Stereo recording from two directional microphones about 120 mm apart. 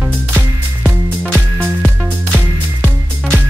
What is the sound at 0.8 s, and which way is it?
Music, 15° right (ahead or behind).